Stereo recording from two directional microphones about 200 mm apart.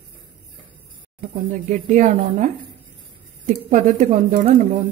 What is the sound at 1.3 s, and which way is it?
Speech, 40° right (ahead or behind).